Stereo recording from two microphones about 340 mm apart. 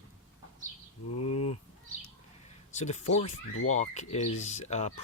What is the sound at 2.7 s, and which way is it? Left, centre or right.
Speech, left.